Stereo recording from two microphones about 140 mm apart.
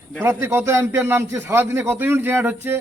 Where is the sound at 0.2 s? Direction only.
15° right (ahead or behind).